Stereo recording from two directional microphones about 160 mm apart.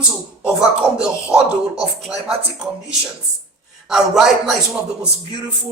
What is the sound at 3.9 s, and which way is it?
Speech, 5° right (ahead or behind).